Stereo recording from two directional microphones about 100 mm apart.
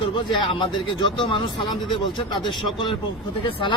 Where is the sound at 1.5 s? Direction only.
45° left (ahead or behind).